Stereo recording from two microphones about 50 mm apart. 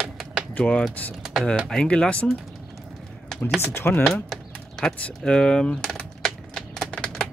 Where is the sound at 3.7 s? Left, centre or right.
Left.